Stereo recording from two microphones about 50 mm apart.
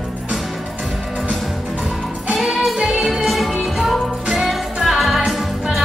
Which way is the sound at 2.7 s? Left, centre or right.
Centre.